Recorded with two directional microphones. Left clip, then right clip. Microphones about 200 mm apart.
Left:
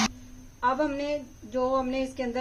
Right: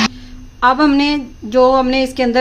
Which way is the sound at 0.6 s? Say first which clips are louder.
Right 14 dB; 55° right (ahead or behind).